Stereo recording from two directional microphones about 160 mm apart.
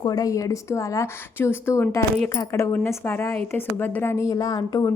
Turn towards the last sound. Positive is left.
turn(degrees=25)  # may be behind; listen again after turning